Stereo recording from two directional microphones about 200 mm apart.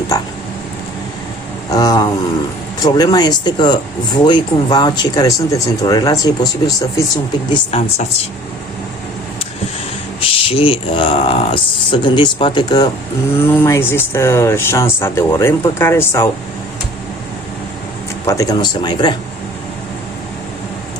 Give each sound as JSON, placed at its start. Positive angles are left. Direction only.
{"t": 1.7, "sound": "speech", "side_deg": 20}
{"t": 7.5, "sound": "speech", "side_deg": 30}
{"t": 10.2, "sound": "speech", "side_deg": 25}
{"t": 13.4, "sound": "speech", "side_deg": 10}
{"t": 18.3, "sound": "speech", "side_deg": 20}